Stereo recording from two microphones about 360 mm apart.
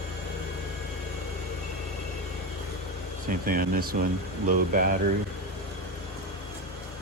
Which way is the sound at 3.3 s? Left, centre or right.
Right.